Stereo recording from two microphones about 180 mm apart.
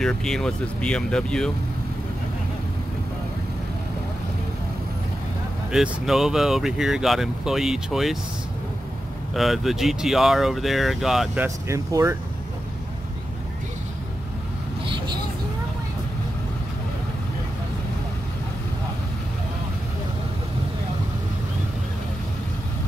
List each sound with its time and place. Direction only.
0.0 s speech: 5° left (ahead or behind)
5.7 s speech: centre (ahead or behind)
9.3 s speech: centre (ahead or behind)
11.4 s speech: 15° right (ahead or behind)